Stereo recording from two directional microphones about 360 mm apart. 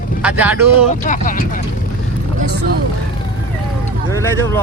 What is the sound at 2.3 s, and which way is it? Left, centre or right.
Vehicle, right.